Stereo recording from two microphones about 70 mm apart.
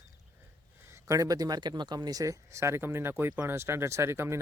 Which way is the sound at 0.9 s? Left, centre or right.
Right.